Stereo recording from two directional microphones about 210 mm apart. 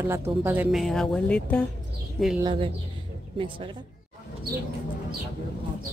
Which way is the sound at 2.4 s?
25° right (ahead or behind).